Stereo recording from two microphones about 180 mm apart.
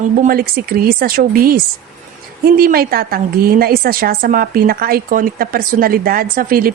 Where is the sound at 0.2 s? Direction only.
55° right (ahead or behind).